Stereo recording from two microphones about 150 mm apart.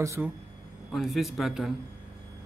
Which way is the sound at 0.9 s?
Centre (ahead or behind).